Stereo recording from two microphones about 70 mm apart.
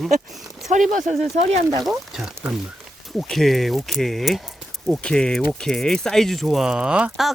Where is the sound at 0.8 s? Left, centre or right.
Centre.